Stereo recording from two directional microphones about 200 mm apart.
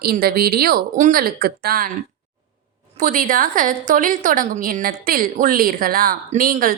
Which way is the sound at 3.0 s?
40° right (ahead or behind).